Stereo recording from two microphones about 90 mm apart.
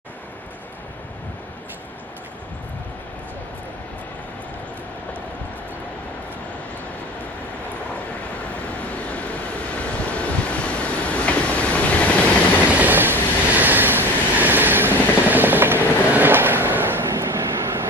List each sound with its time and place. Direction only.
8.9 s vehicle: 15° left (ahead or behind)
12.7 s train: 20° right (ahead or behind)